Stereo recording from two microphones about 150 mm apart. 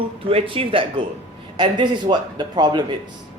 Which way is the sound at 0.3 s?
35° right (ahead or behind).